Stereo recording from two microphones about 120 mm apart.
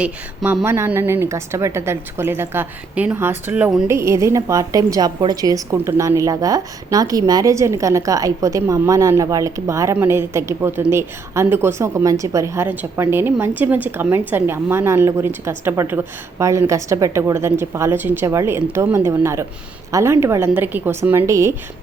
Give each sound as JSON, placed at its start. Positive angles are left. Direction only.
{"t": 0.0, "sound": "a woman's voice", "side_deg": -10}